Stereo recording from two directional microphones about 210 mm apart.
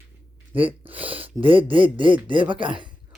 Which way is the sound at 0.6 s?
10° right (ahead or behind).